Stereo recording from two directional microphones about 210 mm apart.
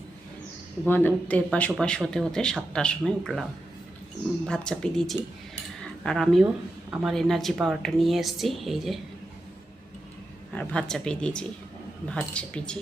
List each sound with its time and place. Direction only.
0.9 s speech: 10° left (ahead or behind)
4.4 s speech: 5° left (ahead or behind)
10.5 s speech: 5° left (ahead or behind)